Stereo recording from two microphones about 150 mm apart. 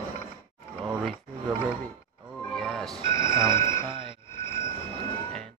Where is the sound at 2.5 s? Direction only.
5° left (ahead or behind).